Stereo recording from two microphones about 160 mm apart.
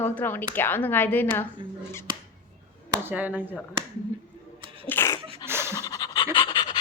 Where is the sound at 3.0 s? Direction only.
10° right (ahead or behind).